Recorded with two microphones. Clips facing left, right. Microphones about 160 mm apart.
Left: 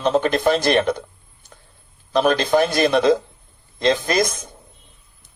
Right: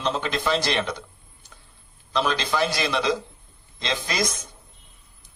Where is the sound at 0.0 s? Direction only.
50° left (ahead or behind).